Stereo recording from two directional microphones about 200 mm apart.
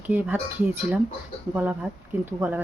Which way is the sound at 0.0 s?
10° right (ahead or behind).